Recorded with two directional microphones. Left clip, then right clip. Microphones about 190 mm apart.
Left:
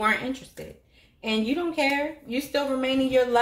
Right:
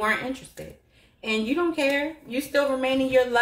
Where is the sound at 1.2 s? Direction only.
40° left (ahead or behind).